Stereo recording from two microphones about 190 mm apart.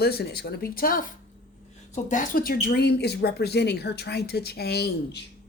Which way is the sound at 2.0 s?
45° left (ahead or behind).